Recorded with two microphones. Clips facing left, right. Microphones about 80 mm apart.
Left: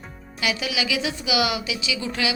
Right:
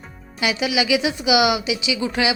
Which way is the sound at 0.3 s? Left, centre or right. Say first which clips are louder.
Right 5 dB; centre.